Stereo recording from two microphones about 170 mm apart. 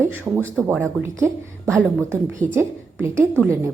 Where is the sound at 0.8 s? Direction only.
15° right (ahead or behind).